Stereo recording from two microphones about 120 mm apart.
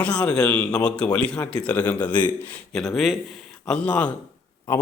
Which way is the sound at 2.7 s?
Centre (ahead or behind).